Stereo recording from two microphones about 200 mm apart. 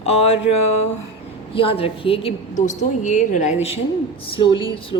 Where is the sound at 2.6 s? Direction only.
40° left (ahead or behind).